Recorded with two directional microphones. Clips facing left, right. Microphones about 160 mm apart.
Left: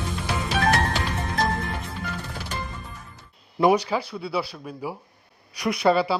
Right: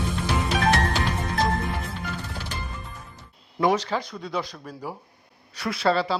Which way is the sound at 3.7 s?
10° left (ahead or behind).